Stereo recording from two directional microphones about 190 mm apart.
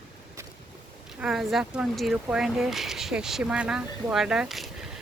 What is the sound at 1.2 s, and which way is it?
Speech, centre (ahead or behind).